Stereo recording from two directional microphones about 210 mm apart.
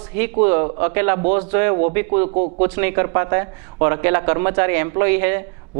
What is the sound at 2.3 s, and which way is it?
Speech, 35° right (ahead or behind).